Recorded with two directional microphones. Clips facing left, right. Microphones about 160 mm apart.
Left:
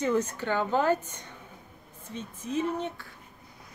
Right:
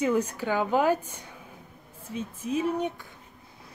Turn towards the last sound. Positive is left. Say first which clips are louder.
# right 2 dB
turn(degrees=-15)  # may be behind; listen again after turning